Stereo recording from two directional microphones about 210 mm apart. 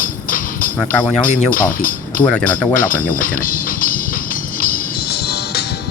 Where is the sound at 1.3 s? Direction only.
40° left (ahead or behind).